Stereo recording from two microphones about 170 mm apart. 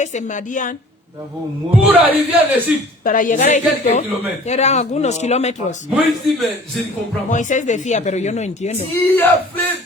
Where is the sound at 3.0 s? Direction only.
50° left (ahead or behind).